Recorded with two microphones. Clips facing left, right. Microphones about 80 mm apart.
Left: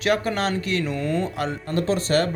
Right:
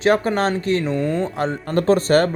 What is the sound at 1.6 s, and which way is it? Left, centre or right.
Speech, right.